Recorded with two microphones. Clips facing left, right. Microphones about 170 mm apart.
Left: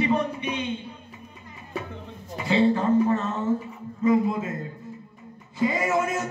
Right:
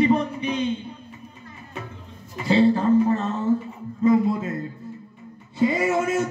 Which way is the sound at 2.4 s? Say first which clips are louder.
Right 3 dB; 35° right (ahead or behind).